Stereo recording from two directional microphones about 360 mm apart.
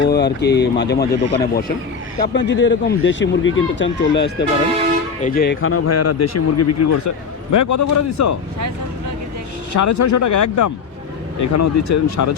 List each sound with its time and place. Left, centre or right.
0.0 s speech: left
9.7 s speech: left